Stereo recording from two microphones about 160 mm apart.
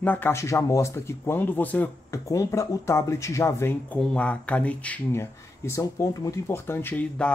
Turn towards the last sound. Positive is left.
turn(degrees=10)  # may be behind; listen again after turning